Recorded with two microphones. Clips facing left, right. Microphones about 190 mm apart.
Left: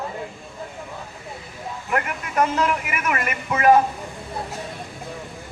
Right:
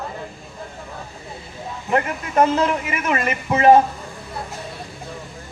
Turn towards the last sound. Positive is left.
turn(degrees=-25)  # may be behind; listen again after turning